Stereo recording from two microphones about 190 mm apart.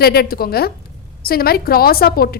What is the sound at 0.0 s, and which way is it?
A woman's voice, 55° left (ahead or behind).